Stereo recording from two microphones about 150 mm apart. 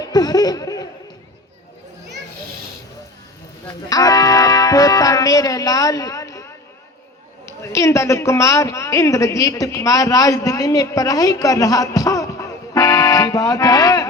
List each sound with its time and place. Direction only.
0.0 s laughter: 25° left (ahead or behind)
3.8 s a man's voice: 25° left (ahead or behind)